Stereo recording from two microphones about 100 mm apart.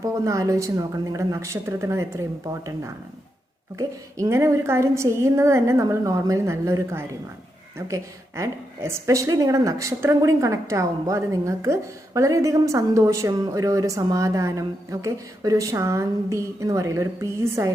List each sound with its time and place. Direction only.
0.0 s a woman's voice: 30° right (ahead or behind)